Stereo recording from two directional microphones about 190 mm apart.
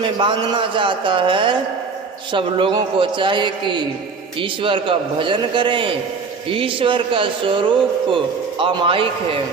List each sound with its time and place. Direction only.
0.2 s a man's voice: 25° right (ahead or behind)